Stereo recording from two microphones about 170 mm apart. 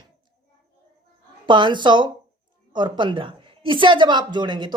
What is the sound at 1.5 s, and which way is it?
A woman's voice, 25° right (ahead or behind).